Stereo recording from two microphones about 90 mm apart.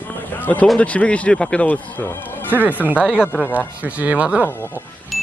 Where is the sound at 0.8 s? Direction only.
15° left (ahead or behind).